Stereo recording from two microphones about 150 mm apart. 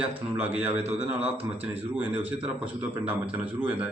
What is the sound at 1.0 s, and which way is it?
Speech, 45° right (ahead or behind).